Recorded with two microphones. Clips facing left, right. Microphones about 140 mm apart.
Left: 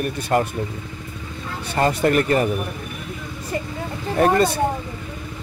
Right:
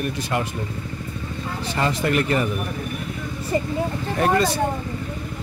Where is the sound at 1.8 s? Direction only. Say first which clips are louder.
Left 4 dB; 45° left (ahead or behind).